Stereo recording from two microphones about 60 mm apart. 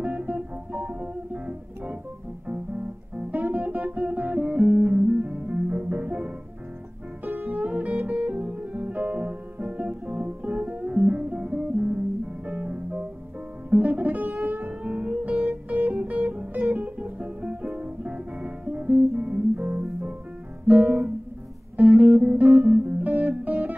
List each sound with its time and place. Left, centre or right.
0.0 s music: right
20.6 s music: right